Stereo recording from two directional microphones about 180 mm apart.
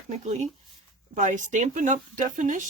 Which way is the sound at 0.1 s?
40° right (ahead or behind).